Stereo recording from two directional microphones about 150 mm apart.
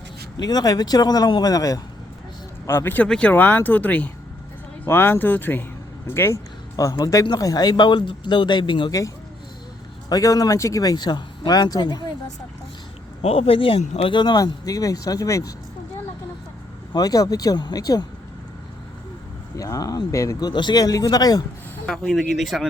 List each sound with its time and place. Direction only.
0.3 s speech: 25° left (ahead or behind)
13.2 s speech: 40° left (ahead or behind); by 15.5 s 20° left (ahead or behind)
16.9 s speech: 25° left (ahead or behind)
19.5 s speech: 25° left (ahead or behind)
21.8 s speech: 5° left (ahead or behind)